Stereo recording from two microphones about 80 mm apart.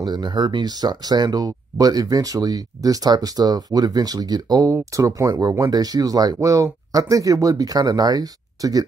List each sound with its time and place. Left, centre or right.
0.0 s speech: right
4.7 s speech: right